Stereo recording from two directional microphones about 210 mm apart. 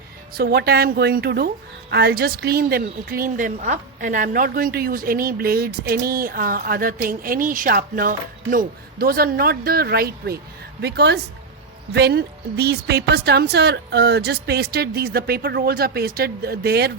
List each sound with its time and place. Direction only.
0.3 s a woman's voice: 50° right (ahead or behind)